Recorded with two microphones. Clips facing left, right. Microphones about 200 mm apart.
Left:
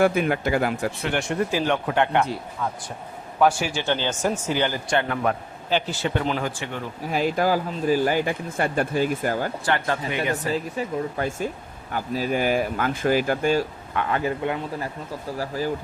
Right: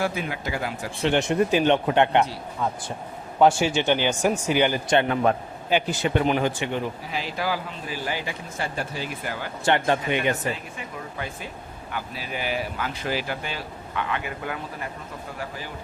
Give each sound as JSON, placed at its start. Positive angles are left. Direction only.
{"t": 0.0, "sound": "speech", "side_deg": 55}
{"t": 1.0, "sound": "speech", "side_deg": -20}
{"t": 3.4, "sound": "speech", "side_deg": -25}
{"t": 7.1, "sound": "speech", "side_deg": 50}
{"t": 9.6, "sound": "speech", "side_deg": -20}
{"t": 10.5, "sound": "speech", "side_deg": 40}
{"t": 15.4, "sound": "speech", "side_deg": 40}